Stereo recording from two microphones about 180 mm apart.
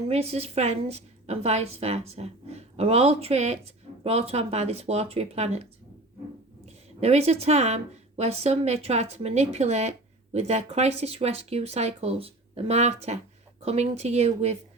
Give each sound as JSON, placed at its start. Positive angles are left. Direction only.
{"t": 0.1, "sound": "a woman's voice", "side_deg": -35}
{"t": 6.7, "sound": "a woman's voice", "side_deg": -35}